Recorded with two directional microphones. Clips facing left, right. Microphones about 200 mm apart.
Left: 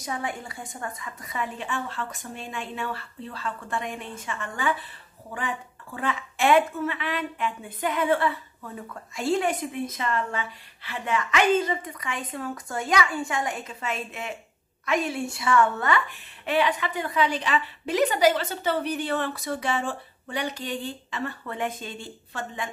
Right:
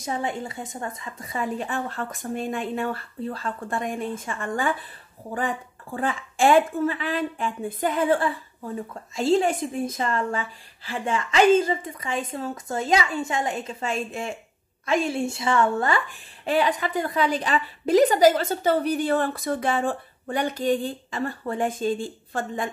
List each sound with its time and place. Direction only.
0.0 s a woman's voice: 25° right (ahead or behind); by 4.7 s 50° right (ahead or behind)
5.9 s a woman's voice: 30° right (ahead or behind)
21.5 s a woman's voice: 30° right (ahead or behind)
21.9 s a woman's voice: 50° right (ahead or behind)